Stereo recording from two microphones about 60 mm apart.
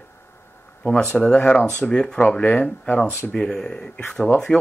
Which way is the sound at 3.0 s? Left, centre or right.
Left.